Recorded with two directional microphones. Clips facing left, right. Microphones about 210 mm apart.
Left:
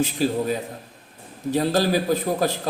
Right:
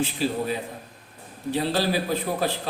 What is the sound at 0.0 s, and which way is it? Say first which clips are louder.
A man's voice: left 3 dB; 45° left (ahead or behind).